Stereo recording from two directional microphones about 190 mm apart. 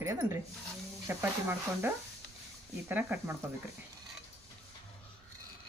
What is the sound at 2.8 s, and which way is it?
Speech, 10° right (ahead or behind).